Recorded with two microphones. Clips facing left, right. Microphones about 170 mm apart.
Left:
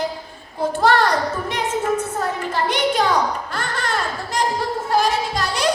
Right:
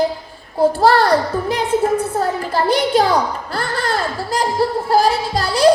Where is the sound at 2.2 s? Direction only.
35° right (ahead or behind).